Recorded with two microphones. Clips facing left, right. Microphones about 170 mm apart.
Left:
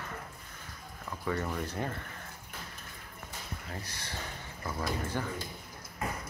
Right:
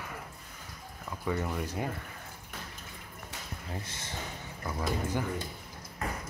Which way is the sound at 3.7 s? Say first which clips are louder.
Right 4 dB; 20° right (ahead or behind).